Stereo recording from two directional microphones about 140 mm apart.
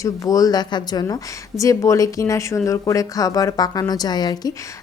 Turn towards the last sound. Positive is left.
turn(degrees=30)  # may be behind; listen again after turning